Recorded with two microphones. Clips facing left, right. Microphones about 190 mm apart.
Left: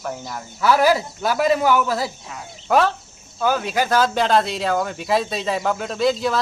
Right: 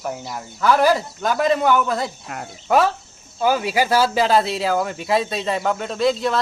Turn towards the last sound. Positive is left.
turn(degrees=0)  # may be behind; listen again after turning